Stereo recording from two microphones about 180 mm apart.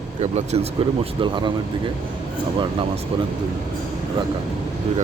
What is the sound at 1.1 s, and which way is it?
Speech, 25° right (ahead or behind).